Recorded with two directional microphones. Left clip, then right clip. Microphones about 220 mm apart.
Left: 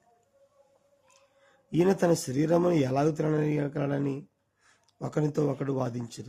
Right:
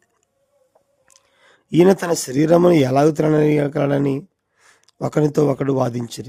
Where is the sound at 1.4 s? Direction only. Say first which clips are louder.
Right 12 dB; 50° right (ahead or behind).